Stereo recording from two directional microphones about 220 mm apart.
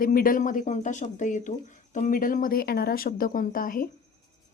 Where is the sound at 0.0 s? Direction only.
40° left (ahead or behind).